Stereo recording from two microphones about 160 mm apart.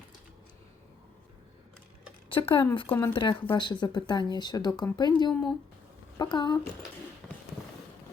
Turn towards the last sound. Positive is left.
turn(degrees=5)  # may be behind; listen again after turning